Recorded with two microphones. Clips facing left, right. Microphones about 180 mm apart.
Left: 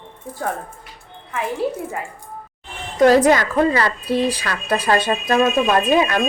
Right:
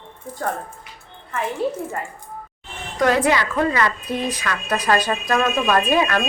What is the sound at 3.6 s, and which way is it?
A woman's voice, 30° left (ahead or behind).